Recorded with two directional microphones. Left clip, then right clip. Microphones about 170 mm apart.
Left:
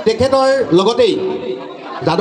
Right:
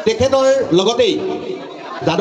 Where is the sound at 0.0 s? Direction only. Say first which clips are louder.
Left 1 dB; 15° left (ahead or behind).